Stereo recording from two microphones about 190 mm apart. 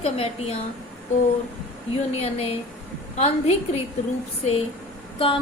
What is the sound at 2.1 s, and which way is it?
A woman's voice, 30° left (ahead or behind).